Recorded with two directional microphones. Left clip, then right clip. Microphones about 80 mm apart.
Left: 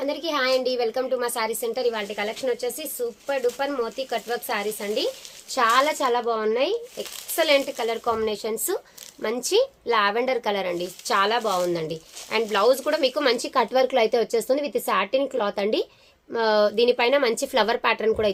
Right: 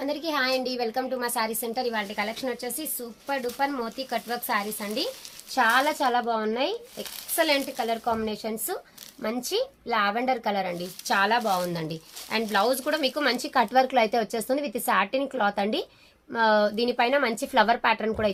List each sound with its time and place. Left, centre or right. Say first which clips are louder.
0.0 s speech: left 2 dB; left
5.5 s a woman's voice: left 2 dB; left